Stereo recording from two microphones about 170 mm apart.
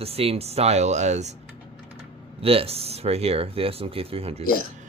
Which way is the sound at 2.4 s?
35° right (ahead or behind).